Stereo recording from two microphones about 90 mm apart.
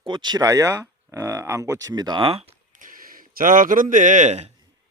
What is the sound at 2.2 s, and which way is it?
Speech, 90° right.